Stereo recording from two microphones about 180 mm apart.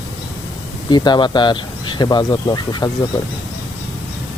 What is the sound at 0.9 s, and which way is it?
Speech, 25° left (ahead or behind).